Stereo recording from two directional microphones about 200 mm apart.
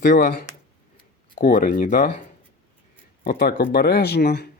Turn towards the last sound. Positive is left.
turn(degrees=55)  # may be behind; listen again after turning